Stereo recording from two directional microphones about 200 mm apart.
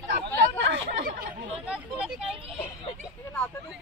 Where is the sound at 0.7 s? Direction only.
60° right (ahead or behind).